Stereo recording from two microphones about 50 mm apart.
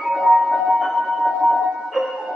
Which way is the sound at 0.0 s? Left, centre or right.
Centre.